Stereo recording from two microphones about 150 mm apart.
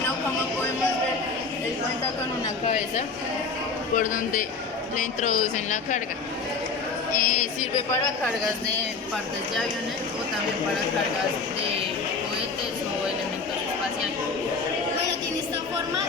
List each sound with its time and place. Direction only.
3.9 s speech: 65° left (ahead or behind)
7.2 s music: 65° left (ahead or behind)